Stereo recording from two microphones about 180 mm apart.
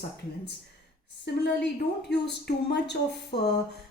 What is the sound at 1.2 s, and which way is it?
A woman's voice, 70° left (ahead or behind).